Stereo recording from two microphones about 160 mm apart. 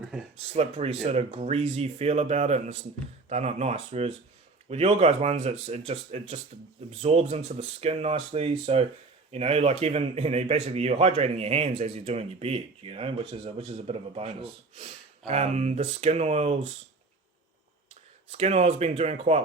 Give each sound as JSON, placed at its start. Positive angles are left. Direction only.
{"t": 0.5, "sound": "a man's voice", "side_deg": -40}
{"t": 18.3, "sound": "a man's voice", "side_deg": -40}